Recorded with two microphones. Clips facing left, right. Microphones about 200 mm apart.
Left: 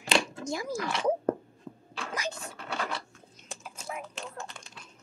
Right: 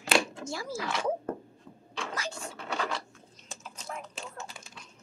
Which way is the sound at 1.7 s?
55° left (ahead or behind).